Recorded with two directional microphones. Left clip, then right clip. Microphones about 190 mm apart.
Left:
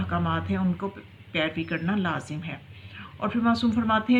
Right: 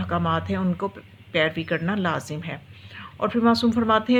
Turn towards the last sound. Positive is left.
turn(degrees=-45)  # may be behind; listen again after turning